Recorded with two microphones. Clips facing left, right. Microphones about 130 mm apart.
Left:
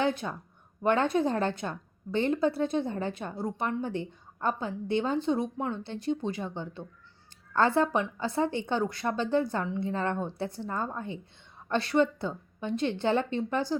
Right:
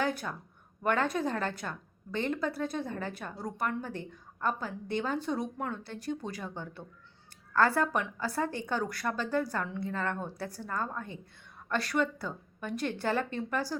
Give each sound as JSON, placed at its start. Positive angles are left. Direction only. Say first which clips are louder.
{"t": 0.2, "sound": "speech", "louder": "left 3 dB", "side_deg": 15}
{"t": 0.9, "sound": "a woman's voice", "louder": "left 4 dB", "side_deg": 25}